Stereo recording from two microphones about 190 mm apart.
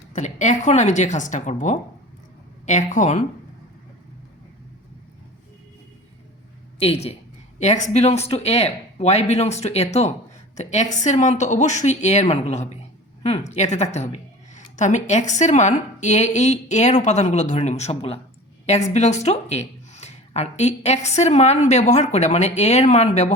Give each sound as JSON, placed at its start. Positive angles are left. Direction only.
{"t": 0.1, "sound": "a woman's voice", "side_deg": 40}
{"t": 6.7, "sound": "a woman's voice", "side_deg": 30}